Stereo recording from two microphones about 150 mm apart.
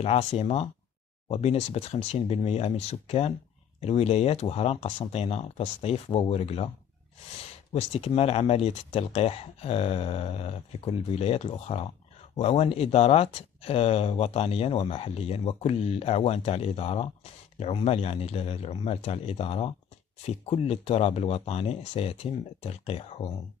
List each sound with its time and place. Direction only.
0.0 s speech: 45° left (ahead or behind)
7.7 s speech: 45° left (ahead or behind)